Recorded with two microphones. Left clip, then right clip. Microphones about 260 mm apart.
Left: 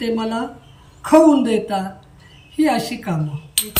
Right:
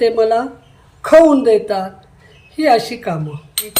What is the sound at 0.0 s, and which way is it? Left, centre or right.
A man's voice, right.